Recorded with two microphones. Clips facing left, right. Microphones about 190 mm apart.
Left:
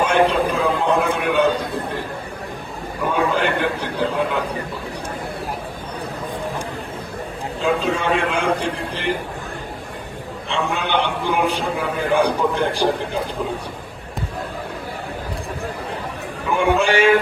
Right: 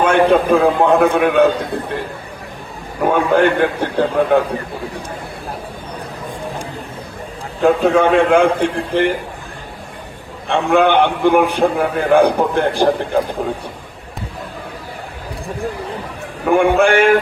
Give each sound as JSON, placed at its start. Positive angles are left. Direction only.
{"t": 0.0, "sound": "a man's voice", "side_deg": -55}
{"t": 3.0, "sound": "a man's voice", "side_deg": -60}
{"t": 7.6, "sound": "a man's voice", "side_deg": -60}
{"t": 10.5, "sound": "a man's voice", "side_deg": -55}
{"t": 16.5, "sound": "a man's voice", "side_deg": -55}